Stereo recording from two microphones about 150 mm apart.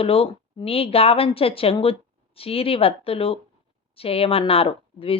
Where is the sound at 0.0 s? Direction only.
40° left (ahead or behind).